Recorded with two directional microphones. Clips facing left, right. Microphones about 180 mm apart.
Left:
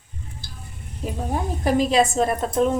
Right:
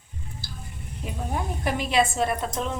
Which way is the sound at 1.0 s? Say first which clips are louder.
Left 4 dB; 40° left (ahead or behind).